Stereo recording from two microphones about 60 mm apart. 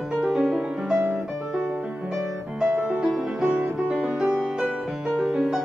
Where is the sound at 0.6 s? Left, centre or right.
Centre.